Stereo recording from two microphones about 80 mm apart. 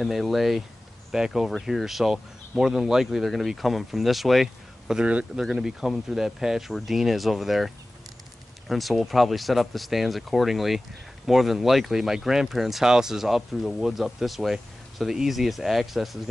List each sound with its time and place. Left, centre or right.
0.0 s speech: centre